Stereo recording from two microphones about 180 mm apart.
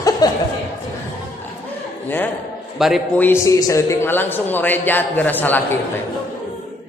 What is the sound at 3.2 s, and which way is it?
A man's voice, 15° left (ahead or behind).